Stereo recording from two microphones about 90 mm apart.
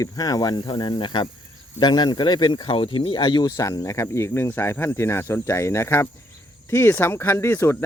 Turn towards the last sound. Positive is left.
turn(degrees=30)  # may be behind; listen again after turning